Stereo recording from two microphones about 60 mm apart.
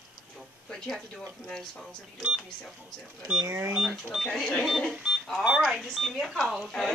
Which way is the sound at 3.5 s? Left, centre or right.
Right.